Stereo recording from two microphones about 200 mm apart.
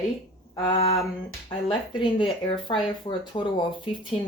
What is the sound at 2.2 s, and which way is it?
Speech, 25° left (ahead or behind).